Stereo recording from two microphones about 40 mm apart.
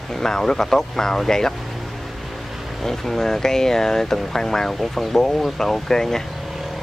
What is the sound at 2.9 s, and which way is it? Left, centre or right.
Speech, centre.